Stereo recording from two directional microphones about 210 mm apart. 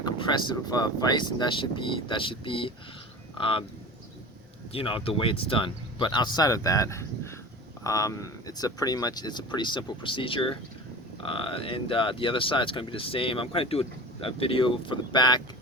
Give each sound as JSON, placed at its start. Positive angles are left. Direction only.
{"t": 0.0, "sound": "speech", "side_deg": 20}
{"t": 4.7, "sound": "speech", "side_deg": 25}